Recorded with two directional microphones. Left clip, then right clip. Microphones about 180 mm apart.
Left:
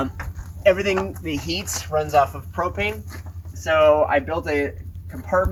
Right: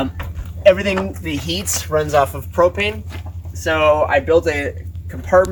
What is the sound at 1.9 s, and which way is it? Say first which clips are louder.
Speech: right 3 dB; 35° right (ahead or behind).